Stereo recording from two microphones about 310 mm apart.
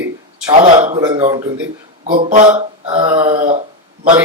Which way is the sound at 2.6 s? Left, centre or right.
Centre.